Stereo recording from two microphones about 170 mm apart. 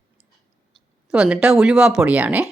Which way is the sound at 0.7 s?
5° right (ahead or behind).